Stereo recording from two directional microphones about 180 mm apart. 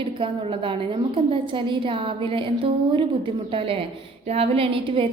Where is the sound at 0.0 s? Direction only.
30° right (ahead or behind).